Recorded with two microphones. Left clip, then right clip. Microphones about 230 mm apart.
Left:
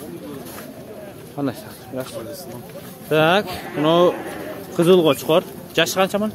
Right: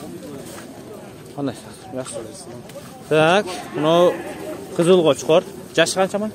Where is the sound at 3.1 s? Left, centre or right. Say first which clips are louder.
Right 1 dB; centre.